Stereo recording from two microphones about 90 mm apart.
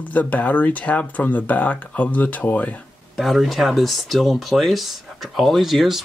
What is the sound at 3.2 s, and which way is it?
Speech, centre (ahead or behind).